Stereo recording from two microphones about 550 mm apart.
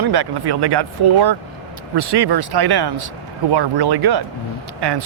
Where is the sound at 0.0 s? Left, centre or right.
Right.